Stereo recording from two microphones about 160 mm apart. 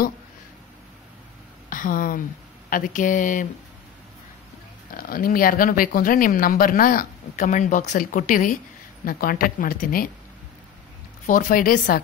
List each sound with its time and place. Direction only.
1.7 s speech: 60° left (ahead or behind)
4.9 s speech: 65° left (ahead or behind)
11.2 s speech: 55° left (ahead or behind)